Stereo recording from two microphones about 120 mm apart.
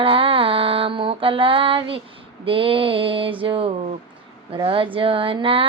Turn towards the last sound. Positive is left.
turn(degrees=-50)  # may be behind; listen again after turning